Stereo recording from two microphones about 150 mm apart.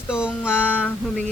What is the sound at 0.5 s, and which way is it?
Speech, 10° left (ahead or behind).